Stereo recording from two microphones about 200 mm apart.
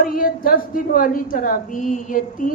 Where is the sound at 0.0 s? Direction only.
45° left (ahead or behind).